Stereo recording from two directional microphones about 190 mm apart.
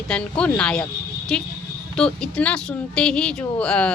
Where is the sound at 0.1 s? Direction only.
5° left (ahead or behind).